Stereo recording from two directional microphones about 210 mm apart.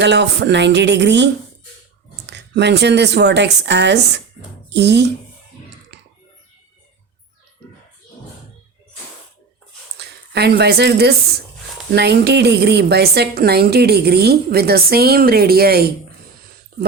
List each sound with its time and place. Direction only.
0.0 s a woman's voice: 55° right (ahead or behind)
10.0 s a woman's voice: 50° right (ahead or behind)